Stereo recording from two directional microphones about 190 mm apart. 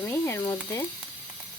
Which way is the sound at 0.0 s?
15° left (ahead or behind).